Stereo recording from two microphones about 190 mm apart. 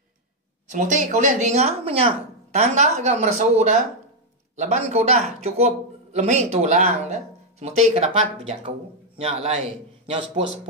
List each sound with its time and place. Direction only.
0.7 s speech: 40° right (ahead or behind)